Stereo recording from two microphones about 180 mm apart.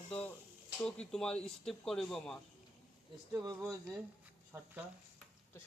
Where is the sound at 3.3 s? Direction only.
15° right (ahead or behind).